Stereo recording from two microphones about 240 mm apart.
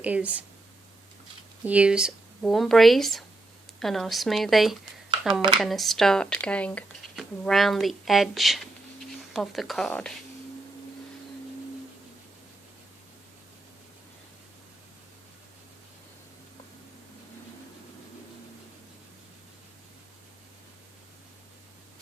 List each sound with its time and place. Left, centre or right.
0.0 s speech: centre
1.6 s speech: centre
5.3 s speech: right
5.5 s speech: centre